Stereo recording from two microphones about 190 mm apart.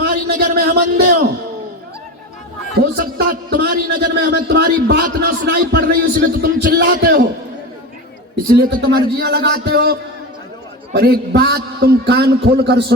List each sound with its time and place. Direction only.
0.0 s a sound: 55° right (ahead or behind)
2.7 s a man's voice: 55° right (ahead or behind)
8.5 s a man's voice: 55° right (ahead or behind)